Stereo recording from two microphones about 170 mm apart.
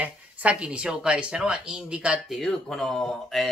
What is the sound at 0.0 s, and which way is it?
Speech, 10° right (ahead or behind).